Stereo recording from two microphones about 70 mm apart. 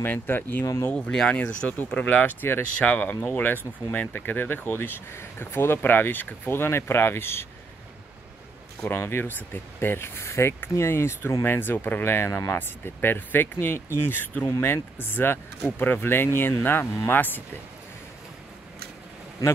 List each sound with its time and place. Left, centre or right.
0.0 s speech: left
0.9 s speech: centre; by 7.4 s left
8.8 s speech: left